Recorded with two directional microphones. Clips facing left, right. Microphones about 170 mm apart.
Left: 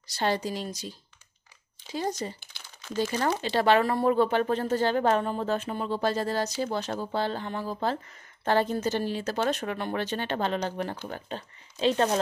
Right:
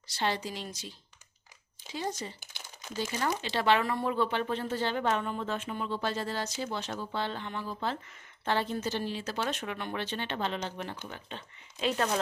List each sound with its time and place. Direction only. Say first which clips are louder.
0.1 s speech: left 5 dB; 40° left (ahead or behind)
2.5 s crumpling: left 4 dB; 15° right (ahead or behind)
3.0 s speech: left 5 dB; 50° left (ahead or behind)
11.8 s speech: left 5 dB; 30° left (ahead or behind)